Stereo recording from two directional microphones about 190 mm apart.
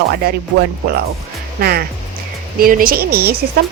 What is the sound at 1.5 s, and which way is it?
Speech, 55° right (ahead or behind).